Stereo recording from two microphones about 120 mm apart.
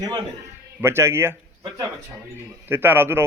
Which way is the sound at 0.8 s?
20° right (ahead or behind).